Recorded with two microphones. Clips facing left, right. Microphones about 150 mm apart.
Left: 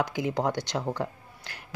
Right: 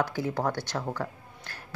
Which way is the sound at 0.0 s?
15° left (ahead or behind).